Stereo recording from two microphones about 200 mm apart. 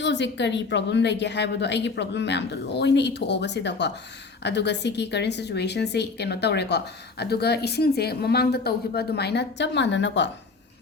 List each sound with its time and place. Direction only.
0.0 s a woman's voice: 60° left (ahead or behind)